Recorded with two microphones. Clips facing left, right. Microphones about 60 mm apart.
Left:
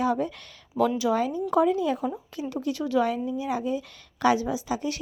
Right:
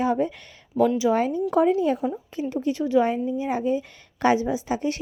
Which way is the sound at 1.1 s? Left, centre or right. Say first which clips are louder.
Right 2 dB; right.